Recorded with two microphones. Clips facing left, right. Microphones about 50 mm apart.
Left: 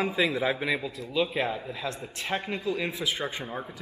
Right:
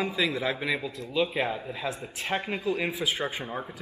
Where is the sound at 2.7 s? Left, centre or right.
Centre.